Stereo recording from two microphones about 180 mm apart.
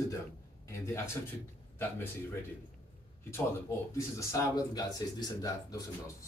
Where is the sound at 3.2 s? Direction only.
15° left (ahead or behind).